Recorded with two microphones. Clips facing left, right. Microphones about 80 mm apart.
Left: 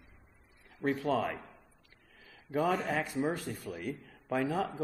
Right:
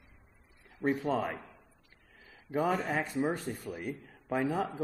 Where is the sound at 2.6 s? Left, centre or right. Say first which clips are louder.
Even; centre.